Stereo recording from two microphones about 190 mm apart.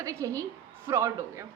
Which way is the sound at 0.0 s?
15° right (ahead or behind).